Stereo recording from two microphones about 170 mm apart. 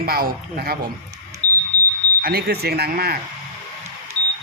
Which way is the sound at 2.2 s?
65° right (ahead or behind).